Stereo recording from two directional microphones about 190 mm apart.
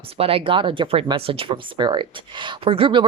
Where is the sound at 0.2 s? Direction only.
30° right (ahead or behind).